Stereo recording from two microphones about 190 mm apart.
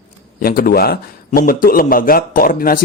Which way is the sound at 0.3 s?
50° left (ahead or behind).